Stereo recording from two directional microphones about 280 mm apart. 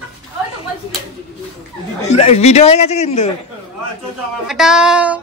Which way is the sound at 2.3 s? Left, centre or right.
Left.